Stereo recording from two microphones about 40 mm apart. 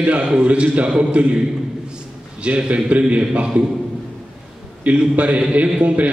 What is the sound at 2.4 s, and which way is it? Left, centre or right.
A man's voice, right.